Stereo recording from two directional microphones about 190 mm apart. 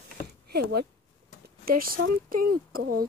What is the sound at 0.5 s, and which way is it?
Speech, 55° right (ahead or behind).